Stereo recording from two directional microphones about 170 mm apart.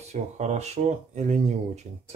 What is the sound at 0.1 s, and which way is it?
A man's voice, 40° right (ahead or behind).